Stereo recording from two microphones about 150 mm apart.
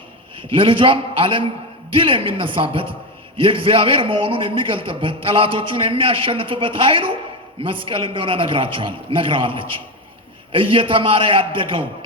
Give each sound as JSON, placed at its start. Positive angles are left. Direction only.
{"t": 0.5, "sound": "a man's voice", "side_deg": -35}